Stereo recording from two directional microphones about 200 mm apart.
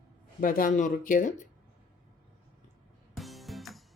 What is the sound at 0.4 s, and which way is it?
Speech, 45° left (ahead or behind).